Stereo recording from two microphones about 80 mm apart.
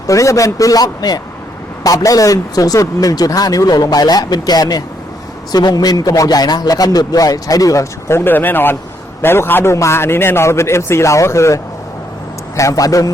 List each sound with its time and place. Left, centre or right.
0.1 s a man's voice: left